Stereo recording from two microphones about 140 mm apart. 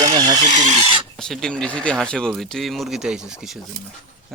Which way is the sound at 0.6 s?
60° right (ahead or behind).